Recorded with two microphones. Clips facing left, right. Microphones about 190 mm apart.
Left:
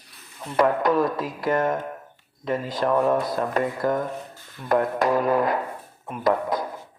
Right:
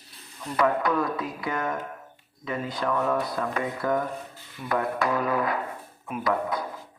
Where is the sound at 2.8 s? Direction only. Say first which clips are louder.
Left 5 dB; 40° left (ahead or behind).